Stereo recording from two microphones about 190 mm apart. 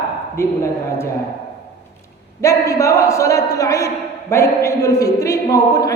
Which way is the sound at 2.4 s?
15° left (ahead or behind).